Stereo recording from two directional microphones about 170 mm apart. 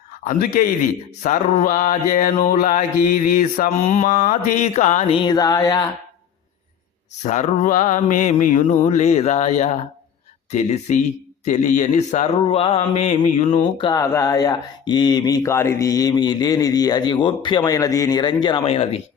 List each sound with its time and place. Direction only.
0.3 s speech: 55° left (ahead or behind); by 5.9 s 20° left (ahead or behind)
7.2 s speech: 45° left (ahead or behind)
13.8 s speech: 15° left (ahead or behind); by 18.9 s 35° left (ahead or behind)